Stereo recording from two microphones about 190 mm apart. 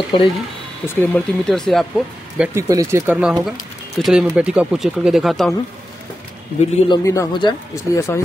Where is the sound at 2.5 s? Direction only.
15° right (ahead or behind).